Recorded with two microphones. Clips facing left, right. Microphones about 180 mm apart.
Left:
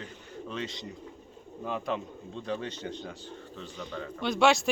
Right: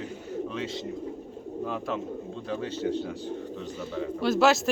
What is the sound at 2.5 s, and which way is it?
Speech, 5° right (ahead or behind).